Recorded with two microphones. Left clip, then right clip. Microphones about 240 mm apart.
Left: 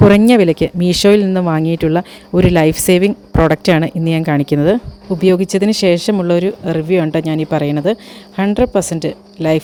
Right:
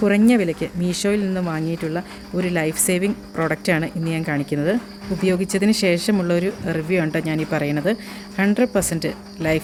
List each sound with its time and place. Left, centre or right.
0.0 s speech: left